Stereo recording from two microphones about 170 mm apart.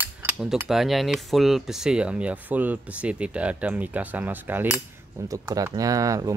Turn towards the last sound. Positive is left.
turn(degrees=-20)  # may be behind; listen again after turning